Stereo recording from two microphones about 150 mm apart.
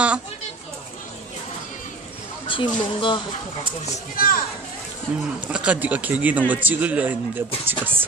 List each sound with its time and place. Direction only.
2.5 s speech: 35° left (ahead or behind)
4.2 s speech: 70° left (ahead or behind)
5.1 s speech: 10° right (ahead or behind)